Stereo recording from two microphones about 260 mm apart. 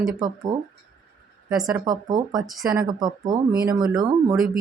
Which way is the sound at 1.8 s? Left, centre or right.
Right.